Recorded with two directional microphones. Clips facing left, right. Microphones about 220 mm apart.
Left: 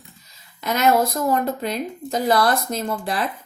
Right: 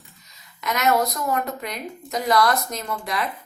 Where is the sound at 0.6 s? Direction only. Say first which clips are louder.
Left 3 dB; 30° left (ahead or behind).